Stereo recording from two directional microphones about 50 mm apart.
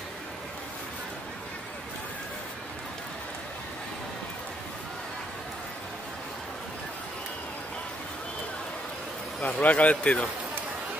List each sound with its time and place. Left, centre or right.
9.4 s speech: left